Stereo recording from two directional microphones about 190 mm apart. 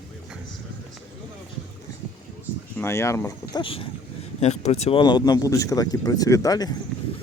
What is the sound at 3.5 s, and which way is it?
Speech, 30° left (ahead or behind).